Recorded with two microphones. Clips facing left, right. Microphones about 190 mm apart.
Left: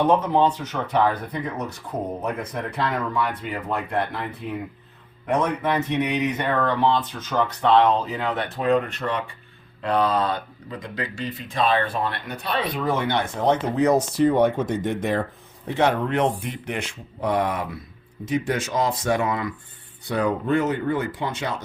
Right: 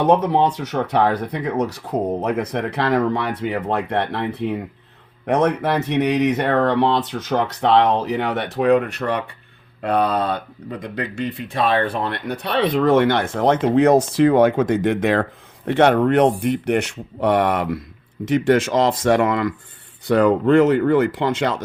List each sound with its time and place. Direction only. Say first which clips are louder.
0.1 s speech: right 3 dB; 70° right (ahead or behind)
12.8 s speech: right 9 dB; 90° right
18.3 s speech: right 8 dB; 90° right